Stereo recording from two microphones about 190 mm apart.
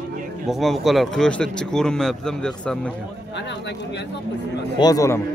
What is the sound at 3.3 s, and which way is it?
Speech, 65° left (ahead or behind).